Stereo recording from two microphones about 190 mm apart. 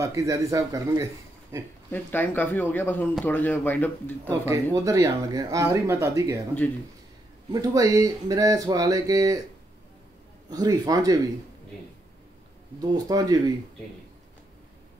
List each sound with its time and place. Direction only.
0.0 s speech: 15° right (ahead or behind)
1.9 s speech: 10° left (ahead or behind)
4.2 s speech: 15° right (ahead or behind)
7.5 s speech: 20° right (ahead or behind)
10.5 s speech: 20° right (ahead or behind)
12.9 s speech: 20° right (ahead or behind)